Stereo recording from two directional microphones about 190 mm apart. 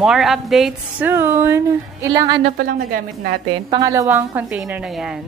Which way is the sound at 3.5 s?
20° right (ahead or behind).